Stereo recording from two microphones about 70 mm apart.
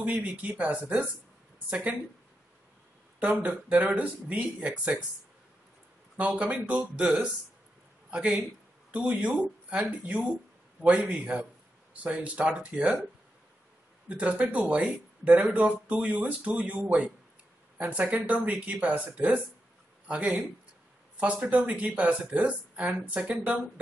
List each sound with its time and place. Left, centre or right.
0.0 s speech: right
3.2 s speech: centre
6.1 s speech: centre
8.9 s speech: centre
14.0 s speech: right